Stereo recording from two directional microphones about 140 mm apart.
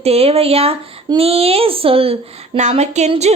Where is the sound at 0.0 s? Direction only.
45° right (ahead or behind).